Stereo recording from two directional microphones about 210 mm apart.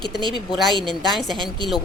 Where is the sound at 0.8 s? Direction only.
Centre (ahead or behind).